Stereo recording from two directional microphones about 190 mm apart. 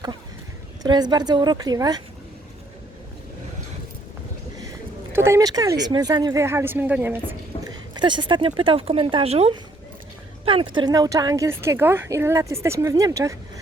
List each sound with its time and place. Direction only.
0.8 s speech: 20° right (ahead or behind)
5.1 s speech: 15° right (ahead or behind)
7.9 s speech: 25° right (ahead or behind)